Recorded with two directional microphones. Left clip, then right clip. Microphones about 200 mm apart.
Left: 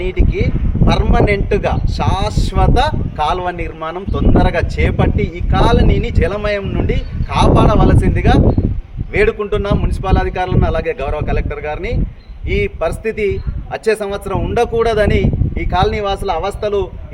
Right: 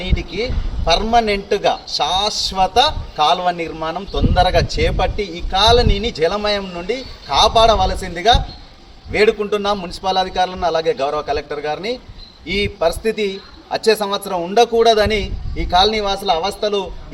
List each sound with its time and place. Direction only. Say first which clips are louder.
0.9 s a man's voice: right 1 dB; 30° left (ahead or behind)